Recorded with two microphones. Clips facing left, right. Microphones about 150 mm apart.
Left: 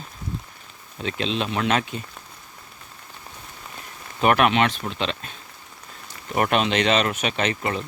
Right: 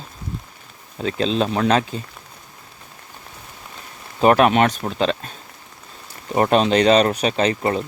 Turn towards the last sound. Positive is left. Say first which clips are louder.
# right 5 dB
turn(degrees=-35)  # may be behind; listen again after turning